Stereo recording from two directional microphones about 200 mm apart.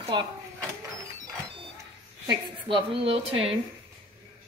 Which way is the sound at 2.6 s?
25° right (ahead or behind).